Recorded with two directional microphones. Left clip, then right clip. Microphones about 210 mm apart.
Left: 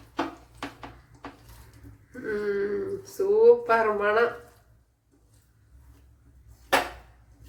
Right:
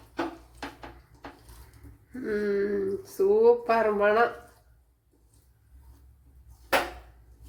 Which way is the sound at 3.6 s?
30° right (ahead or behind).